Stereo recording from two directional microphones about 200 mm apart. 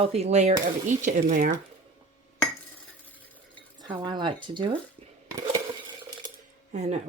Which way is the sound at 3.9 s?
25° right (ahead or behind).